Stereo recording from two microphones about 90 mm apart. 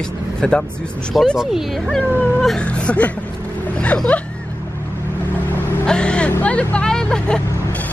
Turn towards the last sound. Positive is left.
turn(degrees=10)  # may be behind; listen again after turning